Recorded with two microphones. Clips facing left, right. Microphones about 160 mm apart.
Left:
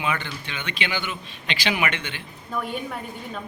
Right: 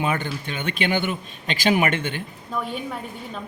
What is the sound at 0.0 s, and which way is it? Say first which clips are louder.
Speech: right 3 dB; 45° right (ahead or behind).